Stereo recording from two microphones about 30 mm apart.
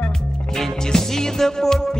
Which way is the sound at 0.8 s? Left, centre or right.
Centre.